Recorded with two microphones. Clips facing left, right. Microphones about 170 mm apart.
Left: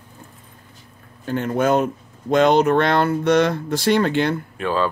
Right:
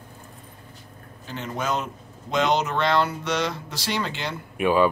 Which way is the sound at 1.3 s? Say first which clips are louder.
Left 9 dB; 55° left (ahead or behind).